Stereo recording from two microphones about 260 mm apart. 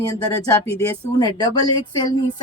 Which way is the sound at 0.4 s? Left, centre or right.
Centre.